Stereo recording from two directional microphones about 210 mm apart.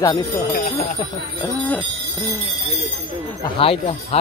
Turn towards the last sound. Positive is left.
turn(degrees=25)  # may be behind; listen again after turning